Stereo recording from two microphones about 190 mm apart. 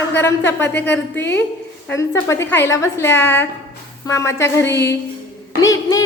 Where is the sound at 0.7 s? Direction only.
65° left (ahead or behind).